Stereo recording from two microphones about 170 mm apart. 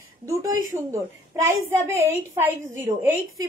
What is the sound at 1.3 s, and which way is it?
A woman's voice, 15° right (ahead or behind).